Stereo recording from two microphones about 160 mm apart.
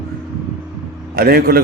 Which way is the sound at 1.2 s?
75° right (ahead or behind).